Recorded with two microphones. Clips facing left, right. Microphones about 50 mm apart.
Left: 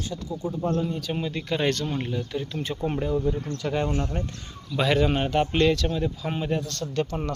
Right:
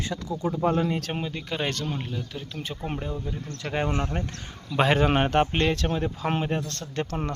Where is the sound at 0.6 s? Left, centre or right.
Right.